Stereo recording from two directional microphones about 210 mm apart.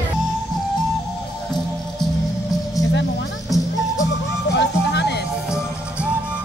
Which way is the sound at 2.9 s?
55° left (ahead or behind).